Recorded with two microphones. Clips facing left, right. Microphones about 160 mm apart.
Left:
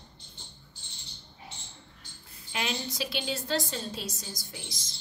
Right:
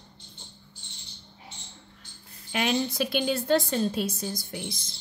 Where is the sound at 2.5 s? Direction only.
55° right (ahead or behind).